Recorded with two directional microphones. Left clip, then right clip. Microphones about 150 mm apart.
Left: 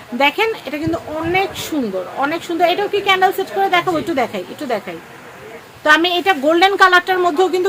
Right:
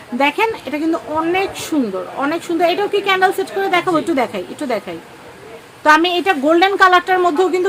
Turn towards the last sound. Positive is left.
turn(degrees=-5)  # may be behind; listen again after turning